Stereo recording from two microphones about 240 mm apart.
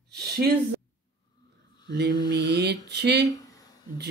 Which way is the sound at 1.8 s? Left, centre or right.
Right.